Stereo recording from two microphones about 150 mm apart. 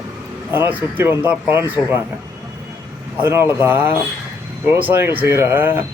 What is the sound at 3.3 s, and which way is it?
Speech, 15° right (ahead or behind).